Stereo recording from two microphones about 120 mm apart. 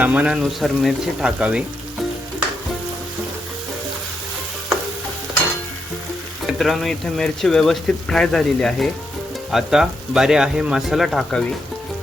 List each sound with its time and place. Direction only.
0.0 s speech: 10° right (ahead or behind)
6.4 s speech: centre (ahead or behind)